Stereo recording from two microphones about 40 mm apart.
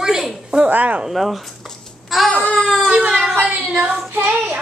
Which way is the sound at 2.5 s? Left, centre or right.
Centre.